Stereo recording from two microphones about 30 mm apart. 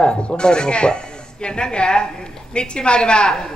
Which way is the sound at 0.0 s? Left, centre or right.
Left.